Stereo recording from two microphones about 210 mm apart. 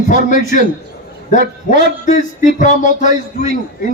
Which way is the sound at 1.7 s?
35° left (ahead or behind).